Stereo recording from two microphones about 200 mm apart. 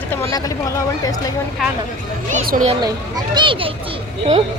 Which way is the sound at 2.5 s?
40° right (ahead or behind).